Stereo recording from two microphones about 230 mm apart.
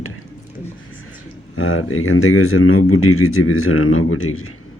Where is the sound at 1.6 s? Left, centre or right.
Left.